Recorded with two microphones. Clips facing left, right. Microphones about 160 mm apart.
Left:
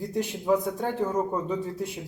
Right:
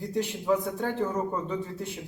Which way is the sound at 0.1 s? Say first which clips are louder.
Left 1 dB; 15° left (ahead or behind).